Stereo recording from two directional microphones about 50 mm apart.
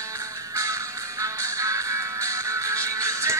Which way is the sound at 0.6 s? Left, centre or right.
Right.